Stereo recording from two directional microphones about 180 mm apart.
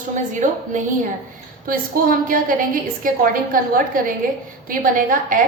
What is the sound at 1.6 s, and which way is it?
A woman's voice, 50° right (ahead or behind).